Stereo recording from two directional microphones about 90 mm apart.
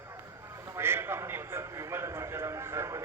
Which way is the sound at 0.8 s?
25° right (ahead or behind).